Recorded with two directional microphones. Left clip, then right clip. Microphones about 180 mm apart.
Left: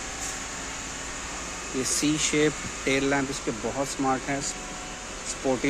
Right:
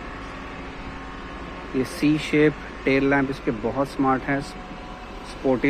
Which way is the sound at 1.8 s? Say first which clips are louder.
Right 3 dB; 5° left (ahead or behind).